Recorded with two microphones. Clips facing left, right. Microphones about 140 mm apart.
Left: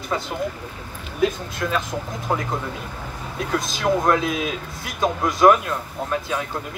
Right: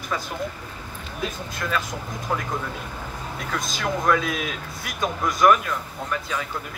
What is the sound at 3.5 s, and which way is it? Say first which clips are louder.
Speech: left 6 dB; 25° left (ahead or behind).